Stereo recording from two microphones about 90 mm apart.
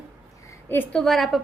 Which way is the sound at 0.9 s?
5° left (ahead or behind).